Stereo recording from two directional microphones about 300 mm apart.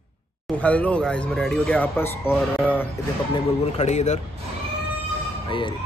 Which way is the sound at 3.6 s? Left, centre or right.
Left.